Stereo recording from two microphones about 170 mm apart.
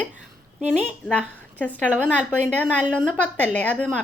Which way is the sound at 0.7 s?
5° left (ahead or behind).